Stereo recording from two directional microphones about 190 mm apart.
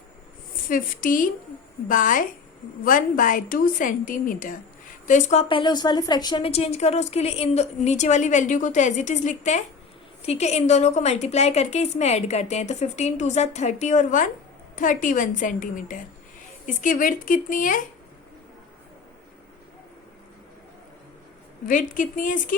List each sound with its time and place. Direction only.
0.7 s a woman's voice: 45° left (ahead or behind)
21.7 s a woman's voice: 45° left (ahead or behind)